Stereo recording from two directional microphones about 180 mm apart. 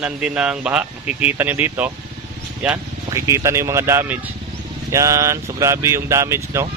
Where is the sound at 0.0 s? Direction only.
5° right (ahead or behind).